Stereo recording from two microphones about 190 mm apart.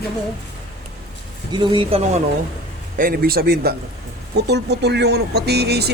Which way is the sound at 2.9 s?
50° right (ahead or behind).